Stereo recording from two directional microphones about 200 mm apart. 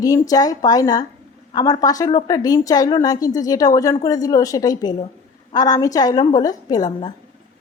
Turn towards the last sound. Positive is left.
turn(degrees=20)  # may be behind; listen again after turning